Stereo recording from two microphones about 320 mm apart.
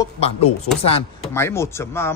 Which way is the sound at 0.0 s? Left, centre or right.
Centre.